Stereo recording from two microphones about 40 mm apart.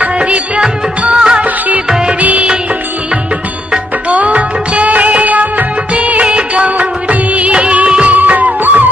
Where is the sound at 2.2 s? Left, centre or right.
Right.